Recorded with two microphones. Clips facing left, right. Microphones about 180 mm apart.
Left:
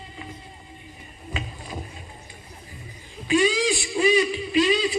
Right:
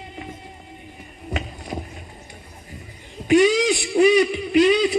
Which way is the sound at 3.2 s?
65° right (ahead or behind).